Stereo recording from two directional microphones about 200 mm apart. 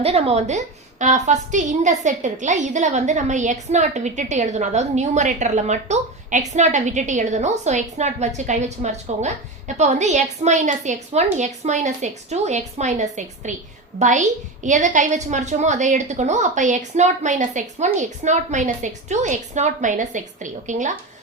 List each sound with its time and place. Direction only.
0.0 s a woman's voice: 30° right (ahead or behind)